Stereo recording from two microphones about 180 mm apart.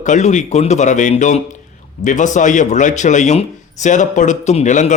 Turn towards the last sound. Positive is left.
turn(degrees=40)  # may be behind; listen again after turning